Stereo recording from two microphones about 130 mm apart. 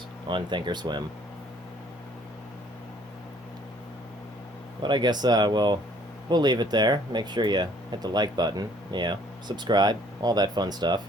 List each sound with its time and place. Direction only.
0.3 s speech: 35° right (ahead or behind)
4.8 s speech: 35° right (ahead or behind)